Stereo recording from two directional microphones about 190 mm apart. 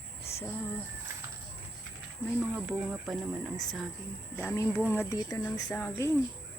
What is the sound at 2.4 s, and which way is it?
Speech, 10° right (ahead or behind).